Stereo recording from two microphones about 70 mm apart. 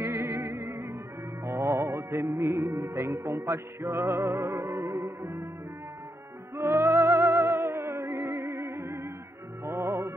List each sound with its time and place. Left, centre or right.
0.0 s music: right
5.2 s music: right
6.5 s music: right